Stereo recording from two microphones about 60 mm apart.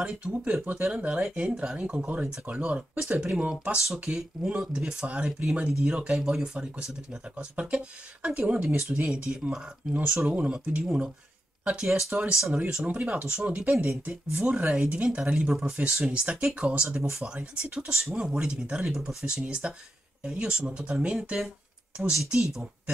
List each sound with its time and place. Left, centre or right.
0.0 s speech: centre
10.8 s speech: centre
12.5 s speech: right
13.4 s speech: centre
13.7 s speech: right; by 19.4 s centre
19.6 s speech: right